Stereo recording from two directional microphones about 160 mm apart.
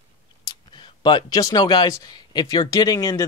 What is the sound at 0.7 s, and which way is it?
Speech, 30° left (ahead or behind).